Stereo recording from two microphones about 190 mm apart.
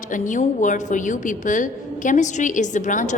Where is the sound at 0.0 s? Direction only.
40° left (ahead or behind).